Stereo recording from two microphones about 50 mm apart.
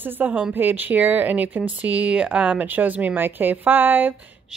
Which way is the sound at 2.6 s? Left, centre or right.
Right.